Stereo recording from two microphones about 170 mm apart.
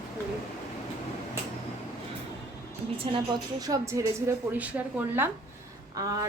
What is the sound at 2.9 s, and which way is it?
Speech, 30° right (ahead or behind).